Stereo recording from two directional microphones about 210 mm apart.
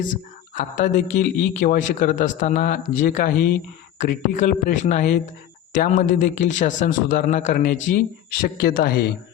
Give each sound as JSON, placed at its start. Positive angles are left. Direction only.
{"t": 0.5, "sound": "a man's voice", "side_deg": 40}